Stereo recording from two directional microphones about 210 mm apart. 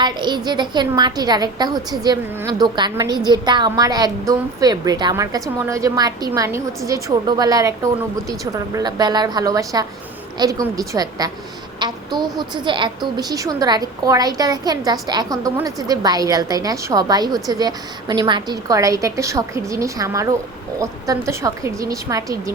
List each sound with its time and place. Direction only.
0.0 s a woman's voice: 20° right (ahead or behind)